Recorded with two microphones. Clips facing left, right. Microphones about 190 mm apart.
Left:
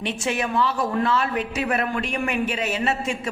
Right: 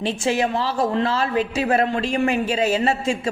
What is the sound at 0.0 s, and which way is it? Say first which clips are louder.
A woman's voice: right 4 dB; 30° right (ahead or behind).